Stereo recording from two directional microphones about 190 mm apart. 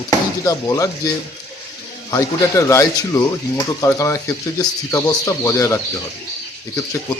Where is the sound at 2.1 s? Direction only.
15° left (ahead or behind).